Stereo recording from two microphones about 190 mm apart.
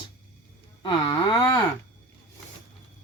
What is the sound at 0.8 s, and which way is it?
Speech, 25° left (ahead or behind).